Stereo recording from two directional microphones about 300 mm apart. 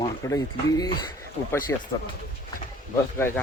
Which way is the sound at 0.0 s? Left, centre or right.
Centre.